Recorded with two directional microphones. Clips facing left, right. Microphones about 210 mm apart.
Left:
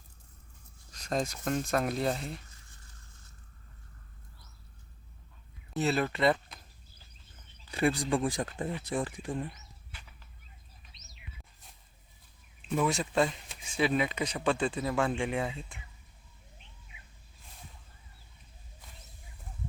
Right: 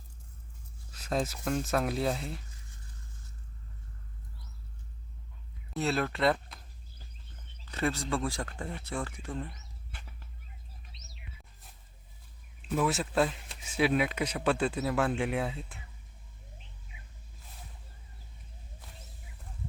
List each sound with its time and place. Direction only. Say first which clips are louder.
0.9 s speech: even; 5° right (ahead or behind)
5.7 s speech: left 1 dB; centre (ahead or behind)
7.6 s speech: left 3 dB; 15° left (ahead or behind)
12.6 s speech: even; centre (ahead or behind)